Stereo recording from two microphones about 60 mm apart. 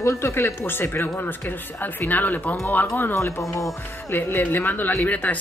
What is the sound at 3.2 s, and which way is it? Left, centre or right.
Speech, left.